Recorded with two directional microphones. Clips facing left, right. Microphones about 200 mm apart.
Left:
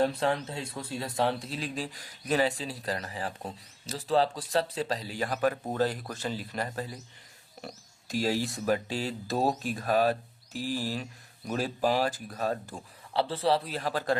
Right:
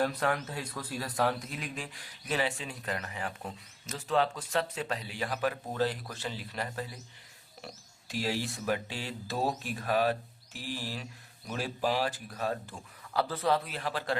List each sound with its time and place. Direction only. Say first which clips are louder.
0.0 s speech: left 3 dB; 25° left (ahead or behind)
8.0 s speech: left 4 dB; 40° left (ahead or behind)
13.1 s speech: left 2 dB; 30° left (ahead or behind)